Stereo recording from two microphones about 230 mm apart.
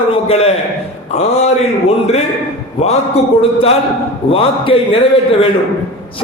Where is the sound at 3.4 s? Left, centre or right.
Left.